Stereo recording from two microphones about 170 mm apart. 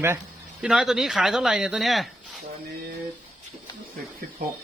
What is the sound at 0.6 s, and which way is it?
Speech, 5° right (ahead or behind).